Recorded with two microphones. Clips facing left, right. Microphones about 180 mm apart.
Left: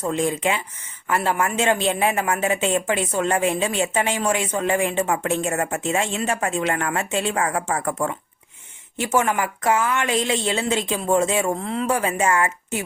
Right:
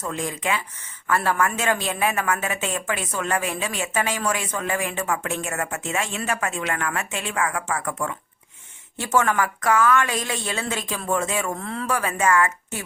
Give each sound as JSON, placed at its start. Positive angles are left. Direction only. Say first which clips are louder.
{"t": 0.0, "sound": "a woman's voice", "louder": "left 6 dB", "side_deg": 30}
{"t": 9.0, "sound": "a woman's voice", "louder": "left 1 dB", "side_deg": 20}